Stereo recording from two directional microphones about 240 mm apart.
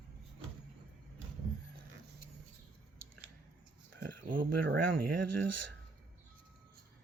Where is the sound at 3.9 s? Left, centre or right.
Right.